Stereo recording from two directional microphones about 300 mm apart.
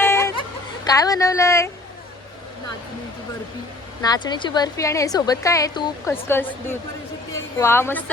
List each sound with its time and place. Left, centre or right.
0.0 s a sound: centre
0.9 s a woman's voice: centre
4.0 s a woman's voice: centre